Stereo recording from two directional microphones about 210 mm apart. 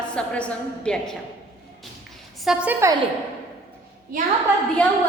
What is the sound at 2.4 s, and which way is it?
Speech, 5° right (ahead or behind).